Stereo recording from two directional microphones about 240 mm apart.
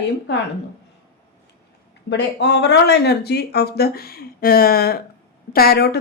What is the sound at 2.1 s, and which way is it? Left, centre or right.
Speech, left.